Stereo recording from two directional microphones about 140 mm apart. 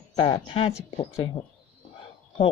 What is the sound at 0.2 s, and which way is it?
Speech, 40° left (ahead or behind).